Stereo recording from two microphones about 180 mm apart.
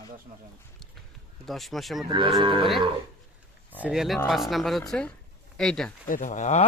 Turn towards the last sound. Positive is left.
turn(degrees=45)  # may be behind; listen again after turning